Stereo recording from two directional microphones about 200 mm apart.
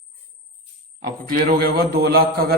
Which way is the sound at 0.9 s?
45° right (ahead or behind).